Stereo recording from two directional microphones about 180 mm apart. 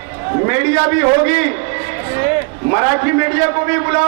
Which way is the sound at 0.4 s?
20° right (ahead or behind).